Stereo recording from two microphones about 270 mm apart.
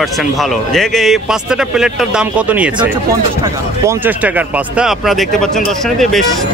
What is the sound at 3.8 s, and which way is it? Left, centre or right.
Speech, centre.